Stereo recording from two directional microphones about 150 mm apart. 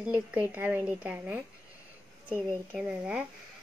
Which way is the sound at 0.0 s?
10° right (ahead or behind).